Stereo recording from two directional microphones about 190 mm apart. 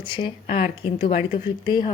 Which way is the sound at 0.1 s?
30° left (ahead or behind).